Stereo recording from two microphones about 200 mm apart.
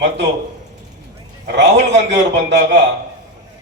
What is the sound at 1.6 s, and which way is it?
A man's voice, 65° right (ahead or behind).